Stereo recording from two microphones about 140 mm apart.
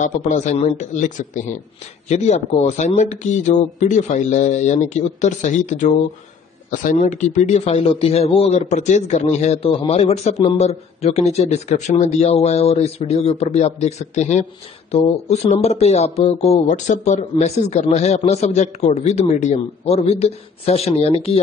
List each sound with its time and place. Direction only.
0.0 s speech: 60° left (ahead or behind)
6.7 s speech: 70° left (ahead or behind)
7.6 s speech: 40° left (ahead or behind)